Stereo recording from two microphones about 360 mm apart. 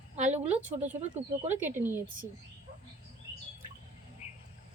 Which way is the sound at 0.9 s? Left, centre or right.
Centre.